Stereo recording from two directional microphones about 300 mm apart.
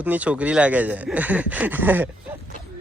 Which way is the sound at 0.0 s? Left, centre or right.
Centre.